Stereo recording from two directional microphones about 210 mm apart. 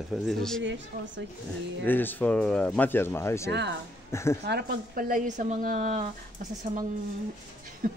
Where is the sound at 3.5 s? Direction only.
55° right (ahead or behind).